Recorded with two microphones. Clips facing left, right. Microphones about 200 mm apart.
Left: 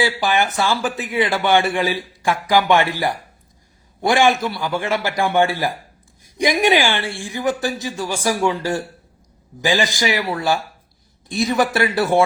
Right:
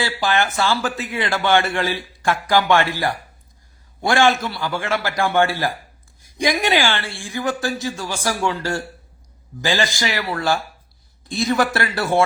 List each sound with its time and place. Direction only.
0.0 s speech: 15° left (ahead or behind)